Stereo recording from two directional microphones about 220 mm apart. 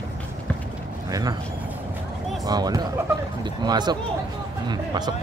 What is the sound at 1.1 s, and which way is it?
Speech, 15° right (ahead or behind).